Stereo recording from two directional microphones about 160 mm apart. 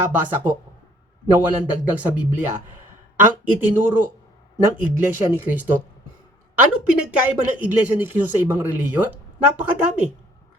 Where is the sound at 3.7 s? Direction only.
15° right (ahead or behind).